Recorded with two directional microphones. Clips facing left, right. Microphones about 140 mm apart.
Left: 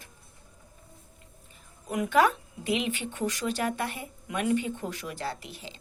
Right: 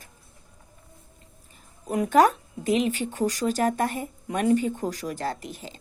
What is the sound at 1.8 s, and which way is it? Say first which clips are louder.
Speech: right 4 dB; 35° right (ahead or behind).